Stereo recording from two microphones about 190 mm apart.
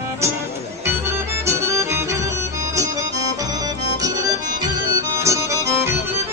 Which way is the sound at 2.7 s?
15° right (ahead or behind).